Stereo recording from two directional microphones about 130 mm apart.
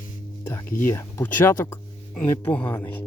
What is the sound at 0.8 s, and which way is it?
Speech, 20° left (ahead or behind).